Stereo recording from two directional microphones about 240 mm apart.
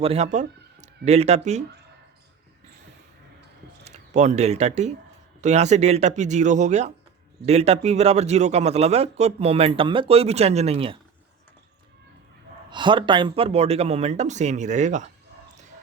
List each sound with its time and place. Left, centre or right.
0.0 s speech: right
3.8 s speech: right
12.7 s speech: centre